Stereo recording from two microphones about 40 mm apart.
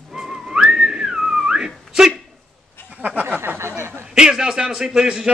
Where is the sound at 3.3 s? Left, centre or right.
Right.